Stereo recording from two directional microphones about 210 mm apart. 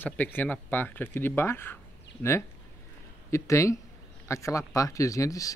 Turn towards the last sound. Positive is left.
turn(degrees=15)  # may be behind; listen again after turning